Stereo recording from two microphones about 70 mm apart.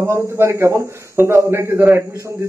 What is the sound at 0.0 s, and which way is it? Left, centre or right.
A man's voice, right.